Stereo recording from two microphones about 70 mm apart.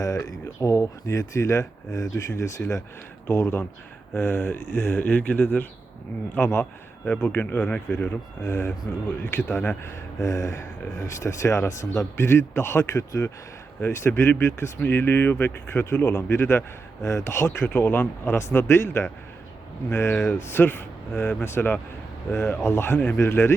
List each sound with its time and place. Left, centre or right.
0.0 s speech: left
9.8 s speech: left
13.8 s speech: left